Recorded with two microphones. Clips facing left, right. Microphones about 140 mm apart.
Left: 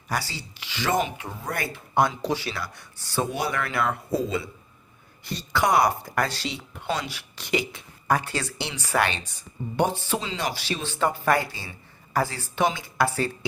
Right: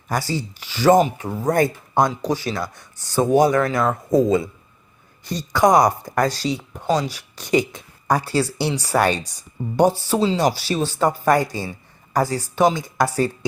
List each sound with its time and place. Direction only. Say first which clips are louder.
0.1 s speech: right 7 dB; 45° right (ahead or behind)